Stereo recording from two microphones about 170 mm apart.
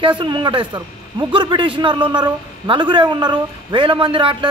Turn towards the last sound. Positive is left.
turn(degrees=-30)  # may be behind; listen again after turning